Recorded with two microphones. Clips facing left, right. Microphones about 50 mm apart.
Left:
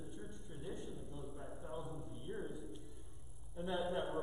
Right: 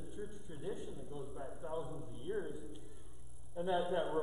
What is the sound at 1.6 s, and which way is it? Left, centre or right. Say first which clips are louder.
Speech: right 5 dB; centre.